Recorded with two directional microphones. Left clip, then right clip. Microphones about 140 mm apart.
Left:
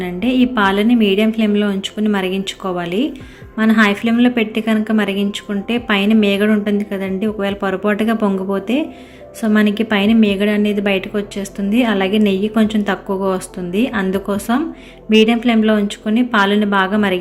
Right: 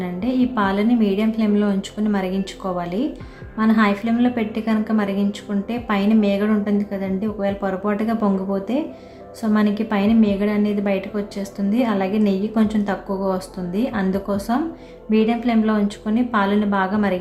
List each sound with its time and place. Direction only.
0.0 s a woman's voice: 15° left (ahead or behind)